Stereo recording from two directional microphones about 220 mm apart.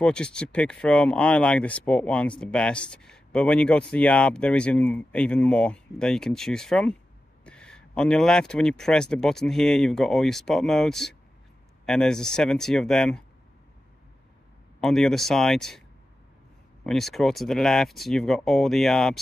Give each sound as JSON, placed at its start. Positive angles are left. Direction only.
{"t": 0.0, "sound": "speech", "side_deg": 5}
{"t": 14.8, "sound": "speech", "side_deg": 0}
{"t": 16.8, "sound": "speech", "side_deg": 0}